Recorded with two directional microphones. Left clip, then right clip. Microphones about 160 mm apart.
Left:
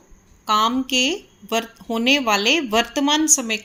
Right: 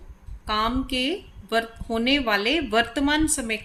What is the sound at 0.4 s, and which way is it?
Speech, 25° left (ahead or behind).